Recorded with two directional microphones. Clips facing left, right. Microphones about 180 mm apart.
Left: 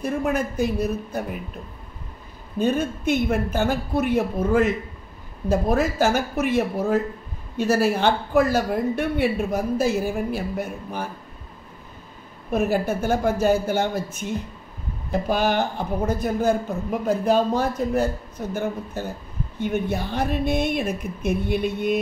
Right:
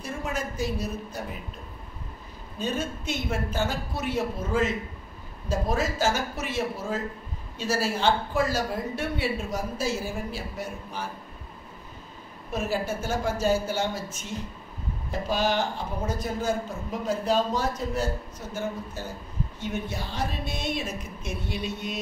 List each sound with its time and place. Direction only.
0.0 s a man's voice: 60° left (ahead or behind)
2.6 s a man's voice: 55° left (ahead or behind)
12.4 s a man's voice: 60° left (ahead or behind)